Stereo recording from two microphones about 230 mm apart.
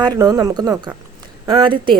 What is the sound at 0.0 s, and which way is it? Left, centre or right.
Speech, centre.